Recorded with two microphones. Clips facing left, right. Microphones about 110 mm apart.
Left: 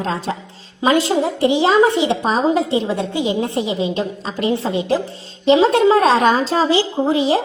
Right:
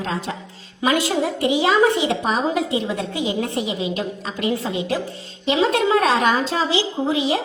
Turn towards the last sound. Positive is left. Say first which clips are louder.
# left 4 dB
turn(degrees=35)  # may be behind; listen again after turning